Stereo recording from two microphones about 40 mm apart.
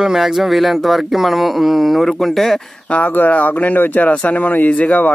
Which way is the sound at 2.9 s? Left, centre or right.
Left.